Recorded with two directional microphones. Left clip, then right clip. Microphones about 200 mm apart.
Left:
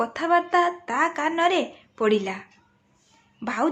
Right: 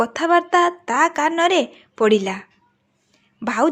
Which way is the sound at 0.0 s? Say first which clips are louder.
Right 5 dB; 35° right (ahead or behind).